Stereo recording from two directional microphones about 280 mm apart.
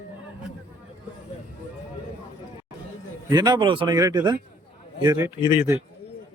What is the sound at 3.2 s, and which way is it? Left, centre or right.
A man's voice, centre.